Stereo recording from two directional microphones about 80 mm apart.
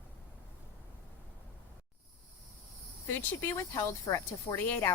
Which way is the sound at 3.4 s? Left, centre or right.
Left.